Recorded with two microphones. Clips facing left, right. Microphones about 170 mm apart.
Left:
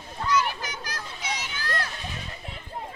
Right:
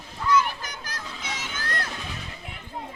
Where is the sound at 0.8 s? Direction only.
50° right (ahead or behind).